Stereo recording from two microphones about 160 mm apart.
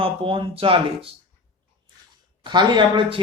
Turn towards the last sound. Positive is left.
turn(degrees=-30)  # may be behind; listen again after turning